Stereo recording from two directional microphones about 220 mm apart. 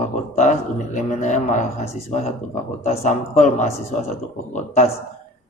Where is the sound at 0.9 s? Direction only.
35° left (ahead or behind).